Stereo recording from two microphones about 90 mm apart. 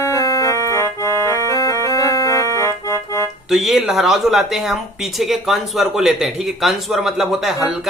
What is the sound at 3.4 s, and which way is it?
Speech, 5° right (ahead or behind).